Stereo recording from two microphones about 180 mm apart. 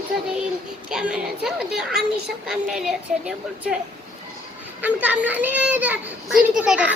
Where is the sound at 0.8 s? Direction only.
5° right (ahead or behind).